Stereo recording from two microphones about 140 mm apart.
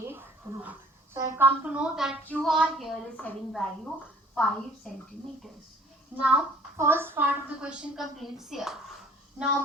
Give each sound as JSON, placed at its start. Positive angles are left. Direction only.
{"t": 0.1, "sound": "a sound", "side_deg": -15}
{"t": 1.4, "sound": "a woman's voice", "side_deg": -10}
{"t": 2.2, "sound": "a woman's voice", "side_deg": 10}
{"t": 2.5, "sound": "a woman's voice", "side_deg": 0}
{"t": 6.1, "sound": "a woman's voice", "side_deg": -10}